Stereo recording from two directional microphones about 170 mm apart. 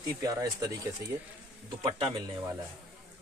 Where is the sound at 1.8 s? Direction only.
35° right (ahead or behind).